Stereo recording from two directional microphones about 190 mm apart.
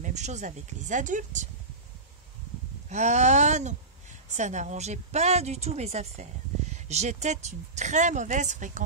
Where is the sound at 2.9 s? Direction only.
35° right (ahead or behind).